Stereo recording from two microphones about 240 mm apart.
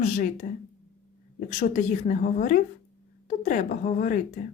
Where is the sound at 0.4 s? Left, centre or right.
Left.